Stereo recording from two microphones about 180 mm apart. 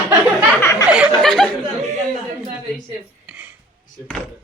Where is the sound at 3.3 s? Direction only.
5° right (ahead or behind).